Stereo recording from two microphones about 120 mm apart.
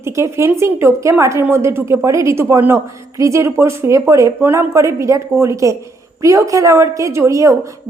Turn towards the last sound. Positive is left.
turn(degrees=-25)  # may be behind; listen again after turning